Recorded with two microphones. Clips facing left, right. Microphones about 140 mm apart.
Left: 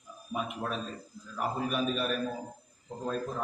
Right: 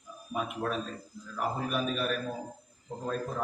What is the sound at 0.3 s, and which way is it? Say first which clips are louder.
A man's voice: right 2 dB; centre (ahead or behind).